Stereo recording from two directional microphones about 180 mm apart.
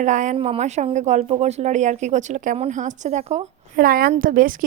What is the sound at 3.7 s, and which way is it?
Speech, 55° right (ahead or behind).